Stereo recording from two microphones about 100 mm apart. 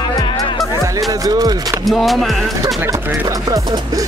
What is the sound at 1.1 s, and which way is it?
Speech, 40° right (ahead or behind).